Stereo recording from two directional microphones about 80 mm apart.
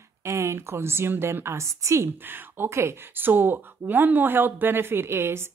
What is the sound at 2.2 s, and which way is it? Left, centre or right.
Speech, right.